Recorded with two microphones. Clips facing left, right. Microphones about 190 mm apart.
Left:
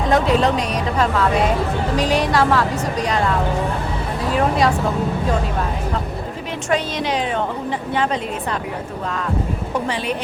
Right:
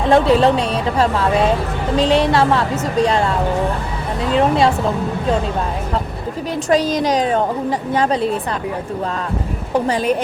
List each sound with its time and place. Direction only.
0.1 s a woman's voice: 30° right (ahead or behind)
4.4 s a woman's voice: 25° right (ahead or behind)
6.7 s a woman's voice: 40° right (ahead or behind)
9.7 s a woman's voice: 40° right (ahead or behind)